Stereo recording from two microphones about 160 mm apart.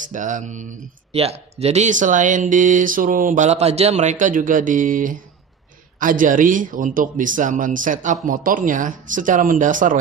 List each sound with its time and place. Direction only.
0.1 s speech: 50° right (ahead or behind)
1.1 s a man's voice: 40° right (ahead or behind); by 9.9 s 55° right (ahead or behind)